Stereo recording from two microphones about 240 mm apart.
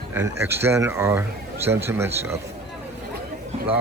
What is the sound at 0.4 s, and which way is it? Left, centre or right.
Speech, centre.